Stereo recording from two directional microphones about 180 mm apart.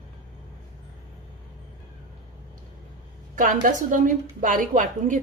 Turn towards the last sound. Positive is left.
turn(degrees=-45)  # may be behind; listen again after turning